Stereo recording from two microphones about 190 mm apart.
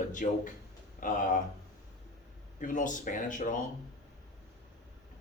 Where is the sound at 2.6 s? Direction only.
45° left (ahead or behind).